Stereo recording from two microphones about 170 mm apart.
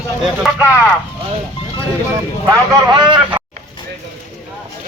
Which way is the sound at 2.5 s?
25° right (ahead or behind).